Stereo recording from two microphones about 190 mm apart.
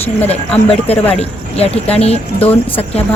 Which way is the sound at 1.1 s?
30° left (ahead or behind).